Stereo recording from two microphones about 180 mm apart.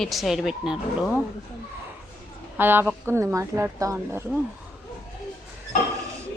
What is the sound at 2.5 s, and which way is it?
Speech, 10° right (ahead or behind).